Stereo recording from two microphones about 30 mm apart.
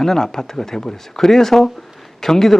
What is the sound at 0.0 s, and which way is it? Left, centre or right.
A man's voice, centre.